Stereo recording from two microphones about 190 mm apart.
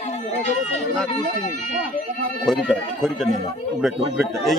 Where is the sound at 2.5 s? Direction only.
Centre (ahead or behind).